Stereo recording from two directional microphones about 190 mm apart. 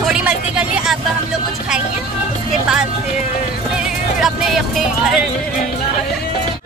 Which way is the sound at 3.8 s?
Centre (ahead or behind).